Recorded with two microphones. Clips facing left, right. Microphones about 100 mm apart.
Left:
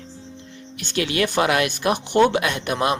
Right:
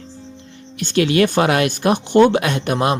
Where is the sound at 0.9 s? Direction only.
45° right (ahead or behind).